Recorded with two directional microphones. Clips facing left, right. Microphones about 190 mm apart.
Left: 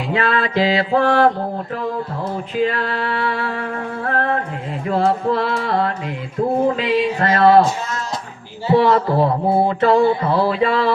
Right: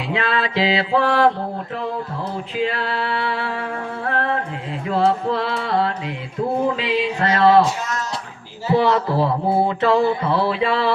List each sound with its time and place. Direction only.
0.1 s speech: 50° left (ahead or behind)
2.6 s speech: 50° left (ahead or behind)
8.7 s speech: 50° left (ahead or behind)